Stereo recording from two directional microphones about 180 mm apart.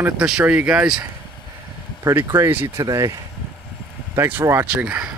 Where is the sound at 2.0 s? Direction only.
15° right (ahead or behind).